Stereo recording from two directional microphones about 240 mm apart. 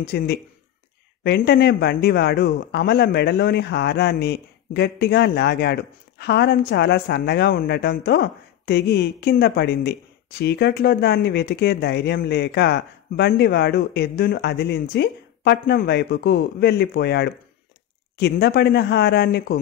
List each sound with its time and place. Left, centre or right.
0.0 s speech: left